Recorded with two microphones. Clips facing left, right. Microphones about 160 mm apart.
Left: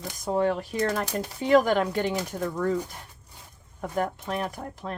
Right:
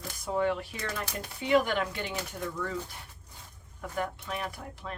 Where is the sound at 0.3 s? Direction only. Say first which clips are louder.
Left 4 dB; 40° left (ahead or behind).